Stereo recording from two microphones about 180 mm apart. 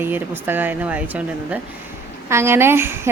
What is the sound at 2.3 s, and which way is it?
Speech, 15° right (ahead or behind).